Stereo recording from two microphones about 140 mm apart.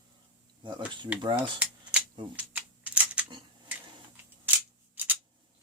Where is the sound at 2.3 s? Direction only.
10° right (ahead or behind).